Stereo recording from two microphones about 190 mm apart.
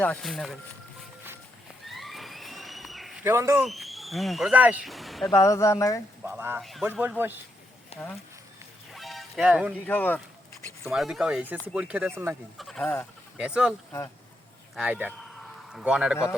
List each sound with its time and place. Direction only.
0.0 s speech: 5° left (ahead or behind)
1.9 s a sound: centre (ahead or behind)
3.2 s speech: 15° right (ahead or behind)
3.6 s speech: centre (ahead or behind)
5.3 s speech: 15° left (ahead or behind)
6.2 s speech: 10° right (ahead or behind)
6.6 s speech: centre (ahead or behind)
7.9 s speech: 35° left (ahead or behind)
8.9 s music: centre (ahead or behind)
9.8 s speech: 10° left (ahead or behind)
10.8 s speech: centre (ahead or behind)
12.5 s speech: centre (ahead or behind)
13.3 s speech: 5° right (ahead or behind)
14.8 s speech: 10° right (ahead or behind)